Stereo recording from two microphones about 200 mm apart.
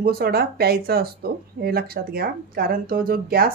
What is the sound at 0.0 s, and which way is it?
Speech, 50° right (ahead or behind).